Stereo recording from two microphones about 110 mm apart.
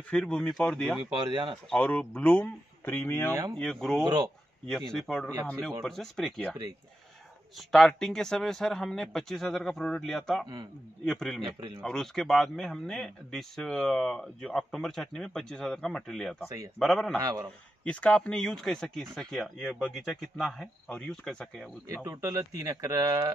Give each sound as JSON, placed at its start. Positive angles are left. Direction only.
{"t": 0.1, "sound": "speech", "side_deg": 10}
{"t": 3.5, "sound": "speech", "side_deg": 5}
{"t": 4.0, "sound": "speech", "side_deg": -35}
{"t": 4.6, "sound": "speech", "side_deg": 5}
{"t": 7.5, "sound": "speech", "side_deg": 5}
{"t": 17.2, "sound": "speech", "side_deg": -30}
{"t": 17.8, "sound": "speech", "side_deg": 10}
{"t": 21.8, "sound": "speech", "side_deg": -30}